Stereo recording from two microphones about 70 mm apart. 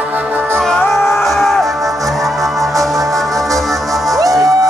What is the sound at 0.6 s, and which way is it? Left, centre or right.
Music, centre.